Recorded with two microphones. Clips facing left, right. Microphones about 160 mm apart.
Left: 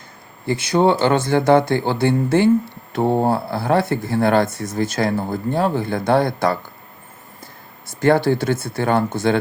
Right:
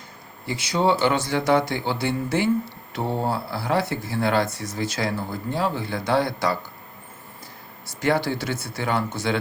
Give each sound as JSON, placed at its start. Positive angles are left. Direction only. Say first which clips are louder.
{"t": 0.4, "sound": "speech", "louder": "left 6 dB", "side_deg": 55}
{"t": 7.9, "sound": "speech", "louder": "left 7 dB", "side_deg": 55}